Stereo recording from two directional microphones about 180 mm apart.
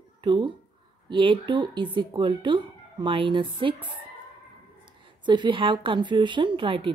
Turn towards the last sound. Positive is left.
turn(degrees=-30)  # may be behind; listen again after turning